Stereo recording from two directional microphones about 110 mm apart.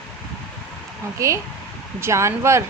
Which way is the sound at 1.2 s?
30° right (ahead or behind).